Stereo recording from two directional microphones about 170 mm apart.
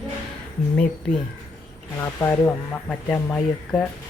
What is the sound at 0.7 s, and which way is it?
Speech, 5° left (ahead or behind).